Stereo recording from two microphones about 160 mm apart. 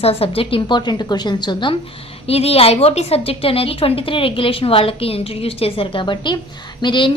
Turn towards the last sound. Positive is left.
turn(degrees=30)  # may be behind; listen again after turning